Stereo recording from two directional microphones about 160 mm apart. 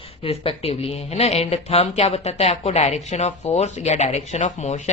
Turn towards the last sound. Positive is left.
turn(degrees=45)  # may be behind; listen again after turning